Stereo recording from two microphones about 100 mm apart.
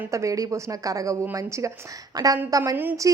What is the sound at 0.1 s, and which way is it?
A woman's voice, 30° right (ahead or behind).